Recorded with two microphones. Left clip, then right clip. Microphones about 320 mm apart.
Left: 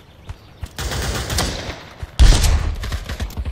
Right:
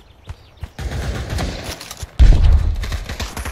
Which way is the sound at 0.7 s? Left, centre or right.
Centre.